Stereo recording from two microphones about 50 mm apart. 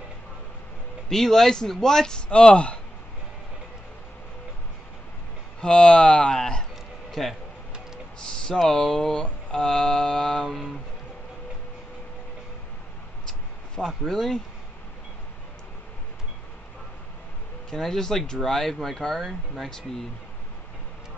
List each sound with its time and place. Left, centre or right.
1.0 s speech: centre
5.6 s speech: left
8.3 s a sound: centre
8.6 s speech: centre
13.3 s a sound: centre
17.6 s speech: centre